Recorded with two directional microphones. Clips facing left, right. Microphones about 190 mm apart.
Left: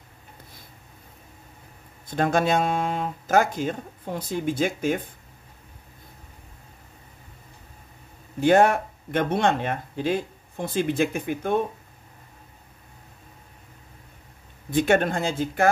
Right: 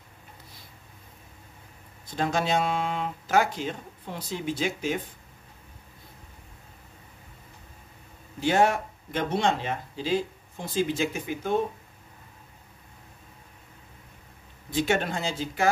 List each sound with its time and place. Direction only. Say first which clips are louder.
2.1 s speech: left 4 dB; 55° left (ahead or behind)
8.4 s speech: left 5 dB; 55° left (ahead or behind)
14.7 s speech: left 5 dB; 55° left (ahead or behind)